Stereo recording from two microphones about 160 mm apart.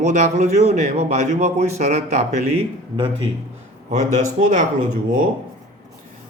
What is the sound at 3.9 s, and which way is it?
Speech, 50° right (ahead or behind).